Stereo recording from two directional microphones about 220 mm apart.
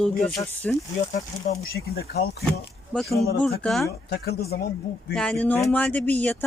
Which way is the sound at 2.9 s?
Centre (ahead or behind).